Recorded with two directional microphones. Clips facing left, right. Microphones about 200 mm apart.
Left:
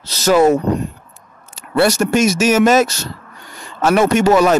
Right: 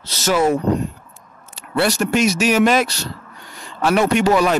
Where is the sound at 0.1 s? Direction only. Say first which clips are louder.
Left 5 dB; 40° left (ahead or behind).